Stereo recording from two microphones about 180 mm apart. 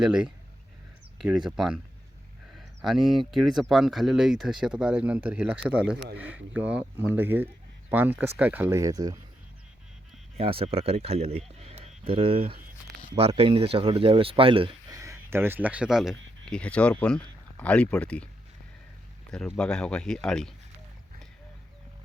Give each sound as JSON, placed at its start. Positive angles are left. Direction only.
{"t": 0.0, "sound": "speech", "side_deg": -5}
{"t": 10.3, "sound": "speech", "side_deg": -30}
{"t": 14.9, "sound": "speech", "side_deg": -15}
{"t": 19.3, "sound": "speech", "side_deg": 5}